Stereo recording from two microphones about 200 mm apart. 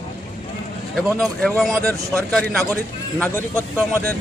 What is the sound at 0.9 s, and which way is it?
Speech, centre (ahead or behind).